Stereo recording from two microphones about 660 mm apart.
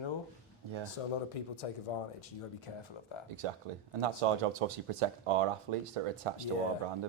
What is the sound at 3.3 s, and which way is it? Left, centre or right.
Speech, right.